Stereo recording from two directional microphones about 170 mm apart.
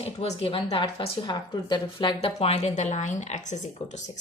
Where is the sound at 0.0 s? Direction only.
35° left (ahead or behind).